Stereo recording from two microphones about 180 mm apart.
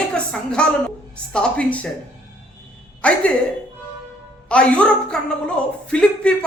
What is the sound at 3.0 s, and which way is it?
Speech, 5° left (ahead or behind).